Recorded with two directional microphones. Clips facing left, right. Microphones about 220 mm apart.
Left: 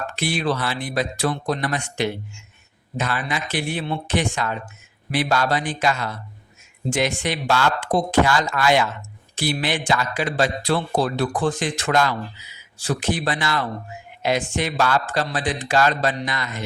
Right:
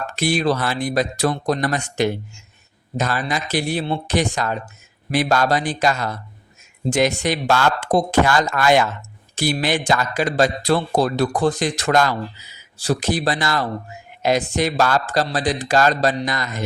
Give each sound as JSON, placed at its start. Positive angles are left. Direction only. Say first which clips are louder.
{"t": 0.2, "sound": "speech", "louder": "right 4 dB", "side_deg": -40}